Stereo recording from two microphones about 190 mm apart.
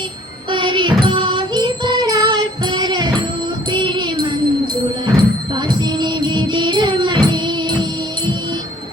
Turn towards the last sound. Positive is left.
turn(degrees=-25)  # may be behind; listen again after turning